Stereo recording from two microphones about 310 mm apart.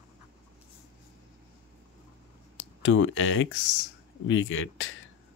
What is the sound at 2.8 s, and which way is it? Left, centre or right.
Speech, left.